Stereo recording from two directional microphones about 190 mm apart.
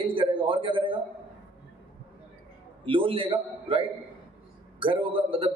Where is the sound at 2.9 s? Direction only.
25° right (ahead or behind).